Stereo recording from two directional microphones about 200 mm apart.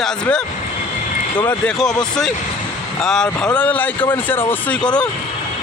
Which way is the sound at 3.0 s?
Centre (ahead or behind).